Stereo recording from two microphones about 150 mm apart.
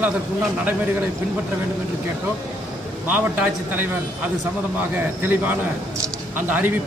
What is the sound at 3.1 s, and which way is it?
Speech, 10° right (ahead or behind).